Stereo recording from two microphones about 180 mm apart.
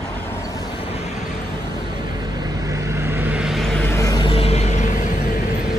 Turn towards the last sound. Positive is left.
turn(degrees=45)  # may be behind; listen again after turning